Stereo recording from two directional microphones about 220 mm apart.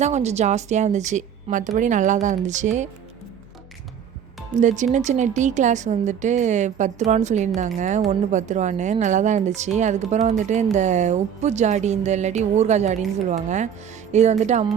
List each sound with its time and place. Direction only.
0.0 s a woman's voice: 30° right (ahead or behind)
4.5 s a woman's voice: 35° right (ahead or behind)